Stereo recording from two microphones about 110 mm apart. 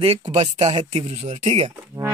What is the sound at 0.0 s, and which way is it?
Speech, 80° right.